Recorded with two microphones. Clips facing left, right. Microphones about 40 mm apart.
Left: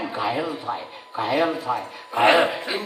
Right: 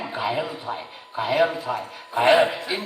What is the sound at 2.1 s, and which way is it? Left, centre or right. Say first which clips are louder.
Speech: even; left.